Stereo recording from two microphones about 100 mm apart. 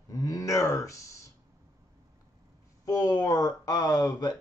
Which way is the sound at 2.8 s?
40° left (ahead or behind).